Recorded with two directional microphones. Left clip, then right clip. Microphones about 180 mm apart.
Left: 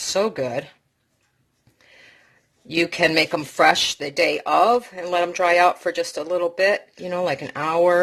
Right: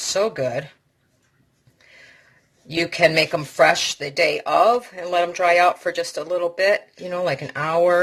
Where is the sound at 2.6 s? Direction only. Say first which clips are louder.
Right 1 dB; 30° left (ahead or behind).